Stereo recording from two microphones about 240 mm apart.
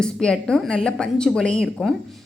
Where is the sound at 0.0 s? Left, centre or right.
Centre.